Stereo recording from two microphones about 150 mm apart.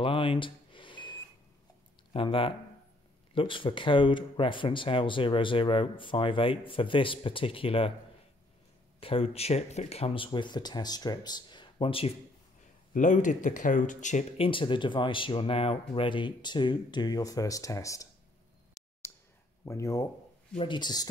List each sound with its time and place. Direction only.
0.0 s a sound: 35° left (ahead or behind)
2.1 s speech: 35° left (ahead or behind)
9.0 s speech: 40° left (ahead or behind)
12.9 s speech: 55° left (ahead or behind)
14.4 s speech: 35° left (ahead or behind)
19.6 s speech: 20° left (ahead or behind)
20.5 s speech: 35° left (ahead or behind)